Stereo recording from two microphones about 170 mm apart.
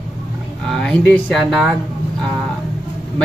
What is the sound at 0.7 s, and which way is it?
Speech, 5° left (ahead or behind).